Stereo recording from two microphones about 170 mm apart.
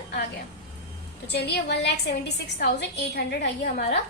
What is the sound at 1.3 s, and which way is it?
A woman's voice, 75° left (ahead or behind).